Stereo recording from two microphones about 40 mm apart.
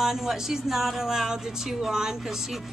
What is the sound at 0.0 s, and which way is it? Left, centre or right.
Speech, centre.